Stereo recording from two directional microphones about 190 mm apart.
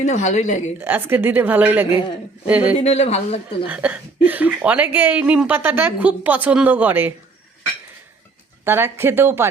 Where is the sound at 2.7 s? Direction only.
35° left (ahead or behind).